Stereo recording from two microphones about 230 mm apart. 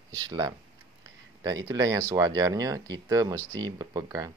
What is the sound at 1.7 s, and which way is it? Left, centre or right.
Speech, centre.